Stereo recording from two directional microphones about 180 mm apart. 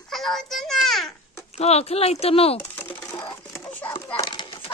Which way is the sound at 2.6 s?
10° left (ahead or behind).